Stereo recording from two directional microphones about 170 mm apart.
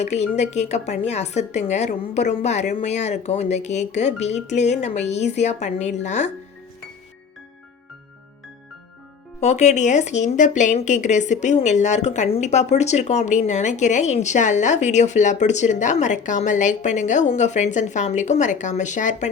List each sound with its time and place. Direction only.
0.0 s a woman's voice: 40° left (ahead or behind)
9.4 s speech: 40° left (ahead or behind)